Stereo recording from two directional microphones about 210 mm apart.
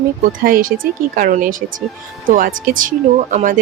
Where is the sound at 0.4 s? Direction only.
45° right (ahead or behind).